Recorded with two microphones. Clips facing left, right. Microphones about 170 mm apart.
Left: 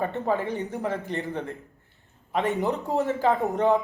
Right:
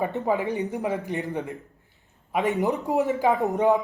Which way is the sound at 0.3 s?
15° right (ahead or behind).